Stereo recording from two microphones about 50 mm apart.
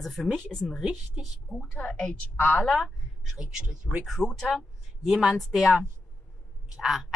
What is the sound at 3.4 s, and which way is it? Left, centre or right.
A woman's voice, centre.